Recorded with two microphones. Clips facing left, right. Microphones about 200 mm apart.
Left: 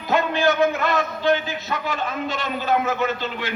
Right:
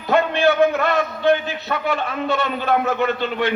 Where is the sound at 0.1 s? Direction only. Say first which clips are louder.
Right 3 dB; 60° right (ahead or behind).